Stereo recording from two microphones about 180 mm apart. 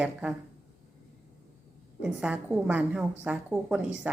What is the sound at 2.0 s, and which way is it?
A woman's voice, 5° right (ahead or behind).